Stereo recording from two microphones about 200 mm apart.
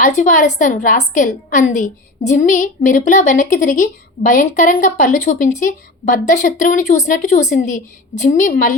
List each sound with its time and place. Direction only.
0.2 s a woman's voice: 35° left (ahead or behind)